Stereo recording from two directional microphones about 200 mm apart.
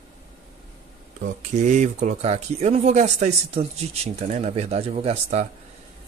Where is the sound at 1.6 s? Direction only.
35° right (ahead or behind).